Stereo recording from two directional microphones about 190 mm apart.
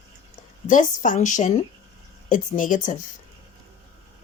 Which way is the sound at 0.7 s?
40° left (ahead or behind).